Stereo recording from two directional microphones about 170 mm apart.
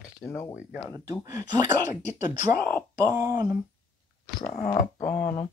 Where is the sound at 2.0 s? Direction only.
45° left (ahead or behind).